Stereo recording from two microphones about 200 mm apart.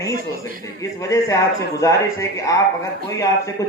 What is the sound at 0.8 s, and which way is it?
Speech, 15° left (ahead or behind).